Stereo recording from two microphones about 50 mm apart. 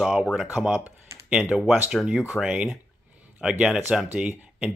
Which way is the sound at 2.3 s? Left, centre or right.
Centre.